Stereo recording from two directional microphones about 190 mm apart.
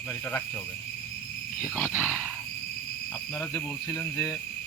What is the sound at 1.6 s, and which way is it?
Roaring cats, 10° right (ahead or behind).